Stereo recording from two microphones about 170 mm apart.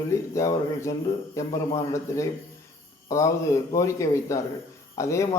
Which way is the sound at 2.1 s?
20° left (ahead or behind).